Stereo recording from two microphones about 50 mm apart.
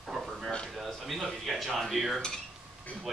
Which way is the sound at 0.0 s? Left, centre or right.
Centre.